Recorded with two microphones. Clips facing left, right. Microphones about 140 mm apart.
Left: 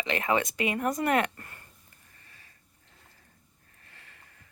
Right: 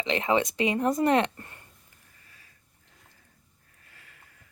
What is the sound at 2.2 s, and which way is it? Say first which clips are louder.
Sniff: left 1 dB; centre (ahead or behind).